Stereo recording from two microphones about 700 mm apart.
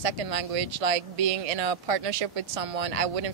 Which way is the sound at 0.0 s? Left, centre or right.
Right.